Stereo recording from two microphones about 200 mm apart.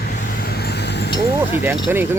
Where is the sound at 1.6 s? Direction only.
10° right (ahead or behind).